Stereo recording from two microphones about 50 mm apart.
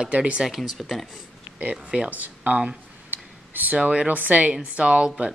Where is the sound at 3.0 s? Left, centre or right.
Right.